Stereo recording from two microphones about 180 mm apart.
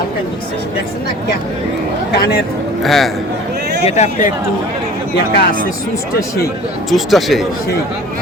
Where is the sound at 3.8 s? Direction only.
40° left (ahead or behind).